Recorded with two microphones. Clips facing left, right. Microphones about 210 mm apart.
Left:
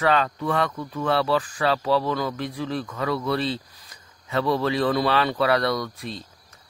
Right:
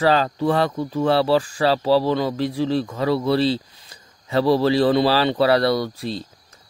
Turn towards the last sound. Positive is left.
turn(degrees=-30)  # may be behind; listen again after turning